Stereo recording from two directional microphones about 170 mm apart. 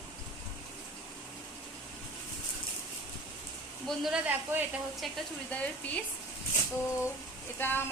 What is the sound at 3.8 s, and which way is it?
Speech, 5° right (ahead or behind).